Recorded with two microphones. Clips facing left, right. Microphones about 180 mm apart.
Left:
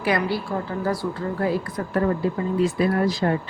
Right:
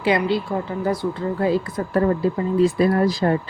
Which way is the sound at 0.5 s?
15° right (ahead or behind).